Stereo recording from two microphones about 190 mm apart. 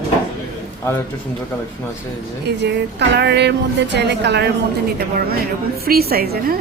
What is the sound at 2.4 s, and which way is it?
Speech, 65° right (ahead or behind).